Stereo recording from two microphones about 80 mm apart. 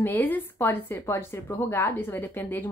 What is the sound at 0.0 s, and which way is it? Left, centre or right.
A woman's voice, left.